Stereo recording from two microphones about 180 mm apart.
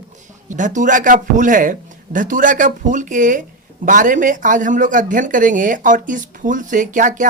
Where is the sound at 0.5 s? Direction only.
45° right (ahead or behind).